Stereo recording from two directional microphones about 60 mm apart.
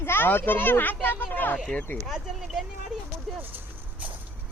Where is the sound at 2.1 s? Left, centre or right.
Centre.